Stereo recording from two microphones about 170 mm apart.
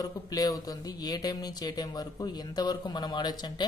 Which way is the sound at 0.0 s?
20° left (ahead or behind).